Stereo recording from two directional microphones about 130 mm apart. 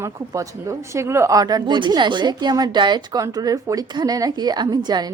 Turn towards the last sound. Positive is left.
turn(degrees=-30)  # may be behind; listen again after turning